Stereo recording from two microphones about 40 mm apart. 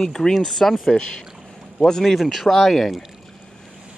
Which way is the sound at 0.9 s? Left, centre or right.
Centre.